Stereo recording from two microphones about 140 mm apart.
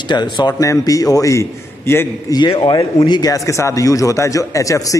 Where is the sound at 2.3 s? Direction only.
35° left (ahead or behind).